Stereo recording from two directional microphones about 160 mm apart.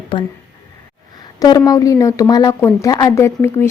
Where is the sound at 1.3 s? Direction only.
20° left (ahead or behind).